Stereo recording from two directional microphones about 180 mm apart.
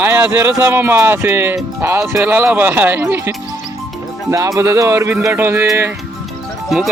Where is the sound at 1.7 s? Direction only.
15° right (ahead or behind).